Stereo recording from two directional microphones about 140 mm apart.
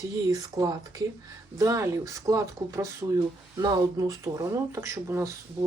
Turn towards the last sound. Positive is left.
turn(degrees=-20)  # may be behind; listen again after turning